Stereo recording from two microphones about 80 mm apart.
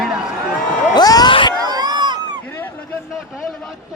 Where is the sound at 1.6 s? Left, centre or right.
Right.